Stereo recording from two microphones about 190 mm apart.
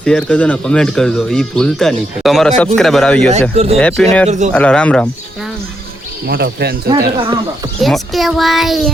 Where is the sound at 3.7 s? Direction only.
5° left (ahead or behind).